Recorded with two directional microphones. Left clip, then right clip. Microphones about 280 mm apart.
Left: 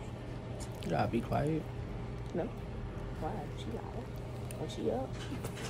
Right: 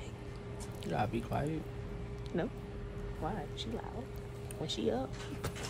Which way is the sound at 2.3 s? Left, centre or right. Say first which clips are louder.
Even; right.